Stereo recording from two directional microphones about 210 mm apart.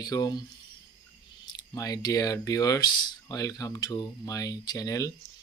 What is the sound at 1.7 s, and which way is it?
Speech, 15° left (ahead or behind).